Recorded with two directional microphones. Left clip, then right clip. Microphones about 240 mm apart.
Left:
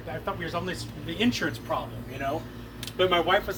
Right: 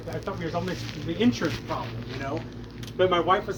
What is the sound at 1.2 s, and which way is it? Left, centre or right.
Speech, centre.